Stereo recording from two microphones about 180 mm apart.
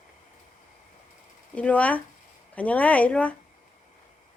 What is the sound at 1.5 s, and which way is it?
Speech, 5° left (ahead or behind).